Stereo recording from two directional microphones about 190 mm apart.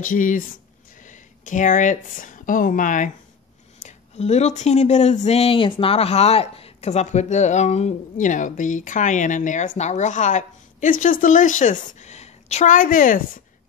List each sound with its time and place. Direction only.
0.0 s a woman's voice: 45° left (ahead or behind)